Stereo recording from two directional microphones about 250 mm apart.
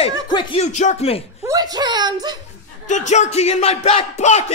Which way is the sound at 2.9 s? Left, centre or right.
Left.